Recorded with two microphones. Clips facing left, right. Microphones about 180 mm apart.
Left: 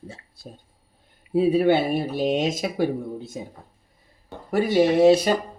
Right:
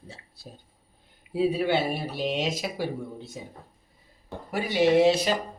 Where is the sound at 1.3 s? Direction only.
50° left (ahead or behind).